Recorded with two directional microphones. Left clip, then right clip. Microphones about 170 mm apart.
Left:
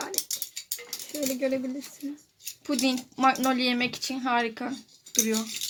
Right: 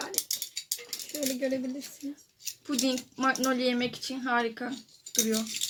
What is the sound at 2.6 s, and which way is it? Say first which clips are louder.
Speech: left 3 dB; 50° left (ahead or behind).